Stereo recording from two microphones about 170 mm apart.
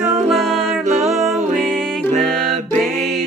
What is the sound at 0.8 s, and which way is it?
Music, 40° right (ahead or behind).